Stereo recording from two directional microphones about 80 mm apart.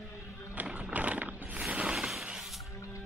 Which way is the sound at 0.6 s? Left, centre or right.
Centre.